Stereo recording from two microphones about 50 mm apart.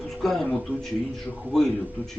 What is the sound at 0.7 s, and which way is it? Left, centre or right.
Speech, left.